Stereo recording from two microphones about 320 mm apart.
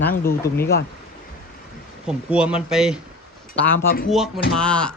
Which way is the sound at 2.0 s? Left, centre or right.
Centre.